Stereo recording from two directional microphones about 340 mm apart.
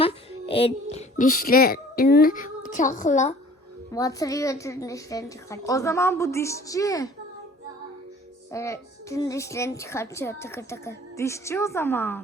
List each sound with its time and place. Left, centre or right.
0.0 s a child's voice: centre
3.9 s a child's voice: centre
8.5 s a child's voice: centre